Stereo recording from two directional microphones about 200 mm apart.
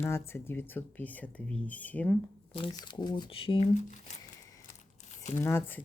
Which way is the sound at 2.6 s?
25° left (ahead or behind).